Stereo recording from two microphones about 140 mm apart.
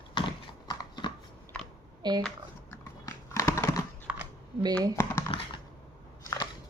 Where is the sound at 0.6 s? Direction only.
30° left (ahead or behind).